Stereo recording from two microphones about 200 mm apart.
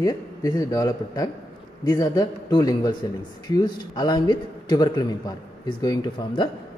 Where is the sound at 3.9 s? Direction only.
20° left (ahead or behind).